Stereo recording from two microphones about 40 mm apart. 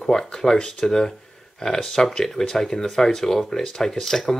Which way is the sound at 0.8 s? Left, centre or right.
Centre.